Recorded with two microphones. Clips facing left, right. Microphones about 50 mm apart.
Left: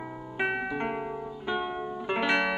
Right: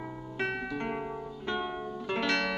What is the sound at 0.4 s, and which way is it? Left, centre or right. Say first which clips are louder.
Music: left 4 dB; centre.